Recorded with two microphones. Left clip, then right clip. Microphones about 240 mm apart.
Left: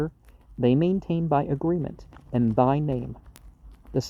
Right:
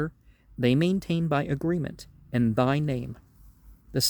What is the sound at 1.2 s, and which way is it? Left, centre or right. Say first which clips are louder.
Speech: left 4 dB; right.